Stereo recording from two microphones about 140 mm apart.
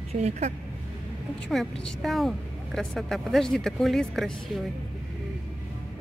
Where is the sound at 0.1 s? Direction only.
50° right (ahead or behind).